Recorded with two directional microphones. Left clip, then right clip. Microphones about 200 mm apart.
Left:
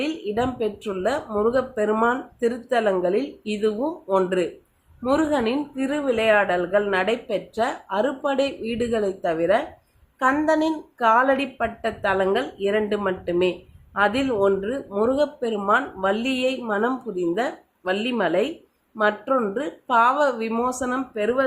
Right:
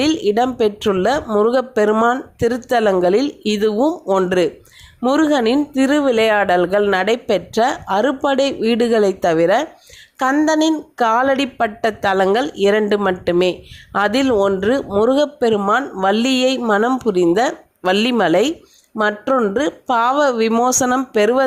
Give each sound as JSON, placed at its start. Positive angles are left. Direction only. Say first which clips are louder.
{"t": 0.0, "sound": "a woman's voice", "louder": "right 9 dB", "side_deg": -45}